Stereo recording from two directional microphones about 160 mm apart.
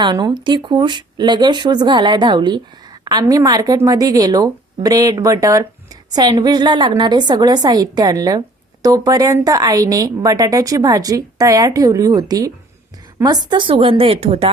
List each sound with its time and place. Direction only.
0.0 s a woman's voice: 30° right (ahead or behind)